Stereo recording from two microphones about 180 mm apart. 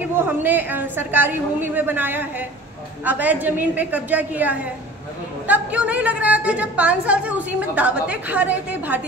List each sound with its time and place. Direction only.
0.2 s a woman's voice: 10° right (ahead or behind)